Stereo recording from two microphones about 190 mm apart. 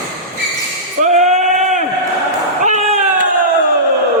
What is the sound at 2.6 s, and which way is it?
Slam, 40° right (ahead or behind).